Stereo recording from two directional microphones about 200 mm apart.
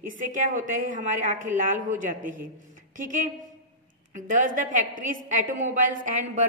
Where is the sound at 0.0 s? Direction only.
40° right (ahead or behind).